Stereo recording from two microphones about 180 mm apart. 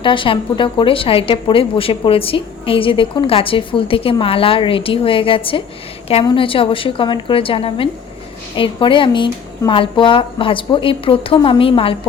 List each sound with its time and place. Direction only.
0.0 s a woman's voice: 25° left (ahead or behind)